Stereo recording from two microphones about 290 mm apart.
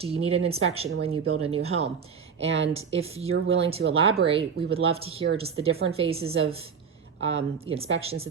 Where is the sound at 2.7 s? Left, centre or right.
Right.